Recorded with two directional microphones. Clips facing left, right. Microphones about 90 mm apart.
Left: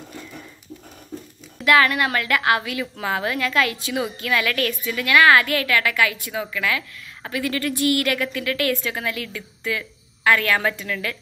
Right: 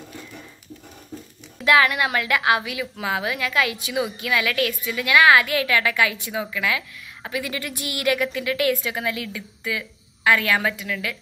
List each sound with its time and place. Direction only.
1.6 s a woman's voice: 20° right (ahead or behind)